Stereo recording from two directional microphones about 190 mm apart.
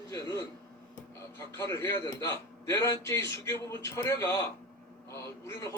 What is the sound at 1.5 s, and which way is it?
Speech, 15° left (ahead or behind).